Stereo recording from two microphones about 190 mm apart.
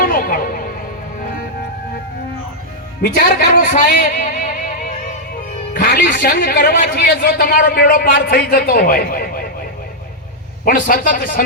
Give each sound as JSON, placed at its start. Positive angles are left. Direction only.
{"t": 0.0, "sound": "music", "side_deg": 50}
{"t": 3.0, "sound": "a man's voice", "side_deg": 50}
{"t": 10.7, "sound": "a man's voice", "side_deg": 45}